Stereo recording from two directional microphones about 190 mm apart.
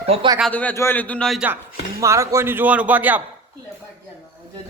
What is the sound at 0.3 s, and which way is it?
Speech, 5° left (ahead or behind).